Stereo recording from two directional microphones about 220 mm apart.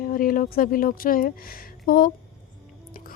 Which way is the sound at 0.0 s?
40° left (ahead or behind).